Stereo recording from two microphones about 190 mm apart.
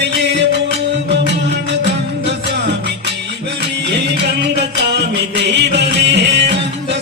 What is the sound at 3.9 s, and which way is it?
Music, 65° right (ahead or behind).